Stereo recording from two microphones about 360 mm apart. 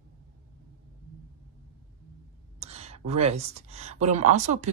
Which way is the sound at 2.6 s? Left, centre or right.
Centre.